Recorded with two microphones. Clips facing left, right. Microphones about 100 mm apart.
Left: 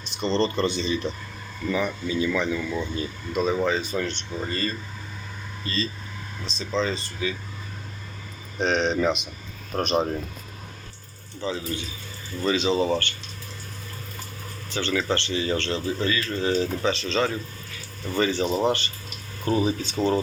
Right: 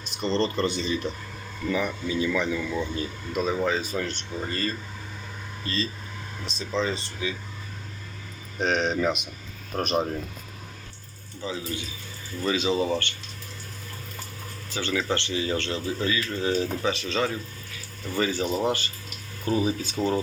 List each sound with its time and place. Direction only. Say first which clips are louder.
0.0 s a man's voice: left 2 dB; 5° right (ahead or behind)
8.5 s a man's voice: left 2 dB; 5° right (ahead or behind)
11.3 s speech: left 3 dB; 10° right (ahead or behind)
14.7 s speech: left 2 dB; 10° right (ahead or behind)
18.4 s speech: left 3 dB; 20° left (ahead or behind)
19.6 s speech: left 2 dB; 10° right (ahead or behind)